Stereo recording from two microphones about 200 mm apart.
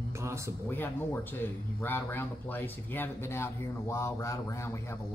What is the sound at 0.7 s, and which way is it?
Speech, 10° left (ahead or behind).